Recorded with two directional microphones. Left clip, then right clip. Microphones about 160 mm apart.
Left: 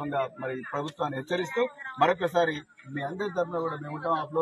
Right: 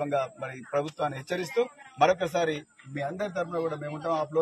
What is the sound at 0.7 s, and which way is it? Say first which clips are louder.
Speech: right 5 dB; 40° right (ahead or behind).